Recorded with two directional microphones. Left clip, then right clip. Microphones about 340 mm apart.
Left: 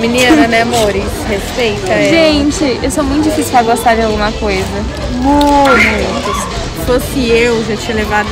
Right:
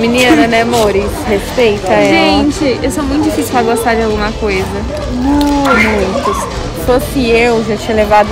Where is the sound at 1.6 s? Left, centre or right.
Centre.